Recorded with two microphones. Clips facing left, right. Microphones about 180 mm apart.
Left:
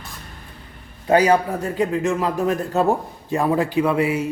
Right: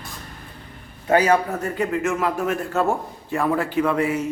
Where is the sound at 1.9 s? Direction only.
35° left (ahead or behind).